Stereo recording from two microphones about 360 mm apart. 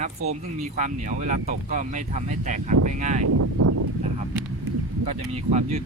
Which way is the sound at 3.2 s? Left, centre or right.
Right.